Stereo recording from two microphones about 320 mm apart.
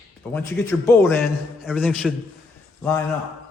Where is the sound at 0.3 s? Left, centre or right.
Centre.